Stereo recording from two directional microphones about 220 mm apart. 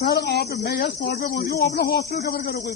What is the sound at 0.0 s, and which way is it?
Speech, 45° left (ahead or behind).